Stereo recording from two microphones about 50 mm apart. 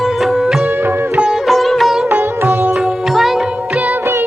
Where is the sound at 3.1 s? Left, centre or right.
Centre.